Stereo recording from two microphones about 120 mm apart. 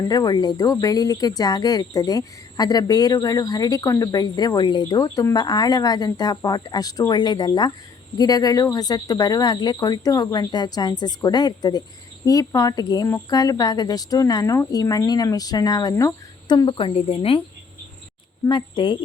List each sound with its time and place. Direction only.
0.0 s speech: 35° left (ahead or behind)
16.5 s speech: 40° left (ahead or behind)
16.9 s speech: 50° left (ahead or behind)
18.4 s speech: 35° left (ahead or behind)